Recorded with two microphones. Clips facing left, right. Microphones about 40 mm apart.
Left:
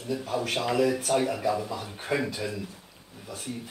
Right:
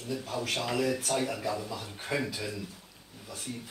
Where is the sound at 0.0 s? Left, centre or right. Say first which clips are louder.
Left 4 dB; centre.